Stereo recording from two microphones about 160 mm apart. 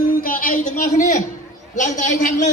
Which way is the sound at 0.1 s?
60° left (ahead or behind).